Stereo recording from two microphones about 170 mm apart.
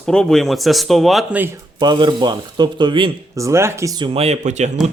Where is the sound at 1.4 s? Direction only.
20° right (ahead or behind).